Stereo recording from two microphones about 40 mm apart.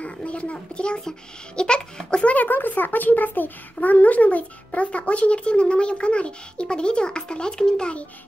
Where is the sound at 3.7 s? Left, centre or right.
Left.